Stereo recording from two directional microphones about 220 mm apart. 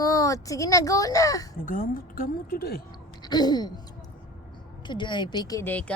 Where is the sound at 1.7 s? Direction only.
40° left (ahead or behind).